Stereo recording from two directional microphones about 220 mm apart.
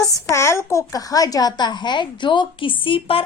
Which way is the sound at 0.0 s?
15° left (ahead or behind).